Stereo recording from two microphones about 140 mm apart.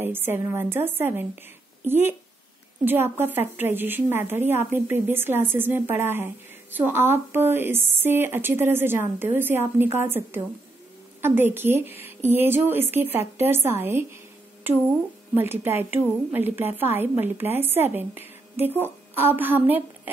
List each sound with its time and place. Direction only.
0.0 s a woman's voice: 15° right (ahead or behind)